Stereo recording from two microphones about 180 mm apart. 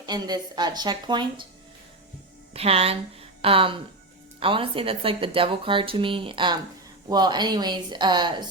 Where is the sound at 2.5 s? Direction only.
35° right (ahead or behind).